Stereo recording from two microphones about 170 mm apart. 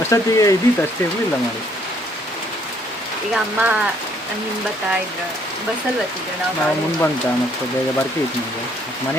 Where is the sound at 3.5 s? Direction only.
5° right (ahead or behind).